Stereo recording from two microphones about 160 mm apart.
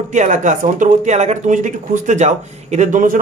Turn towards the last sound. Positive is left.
turn(degrees=-55)  # may be behind; listen again after turning